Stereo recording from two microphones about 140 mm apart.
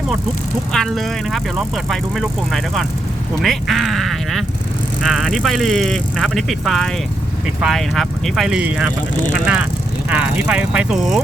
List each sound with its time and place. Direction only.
0.7 s speech: 5° left (ahead or behind)
10.1 s speech: 10° right (ahead or behind)